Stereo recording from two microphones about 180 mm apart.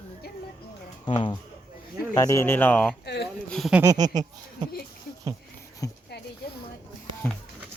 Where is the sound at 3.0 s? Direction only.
65° left (ahead or behind).